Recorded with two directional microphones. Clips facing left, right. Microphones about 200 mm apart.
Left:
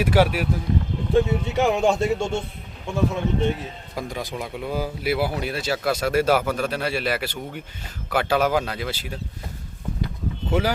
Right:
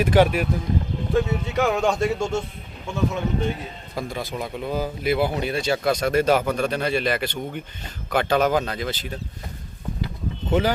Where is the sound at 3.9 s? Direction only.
15° left (ahead or behind).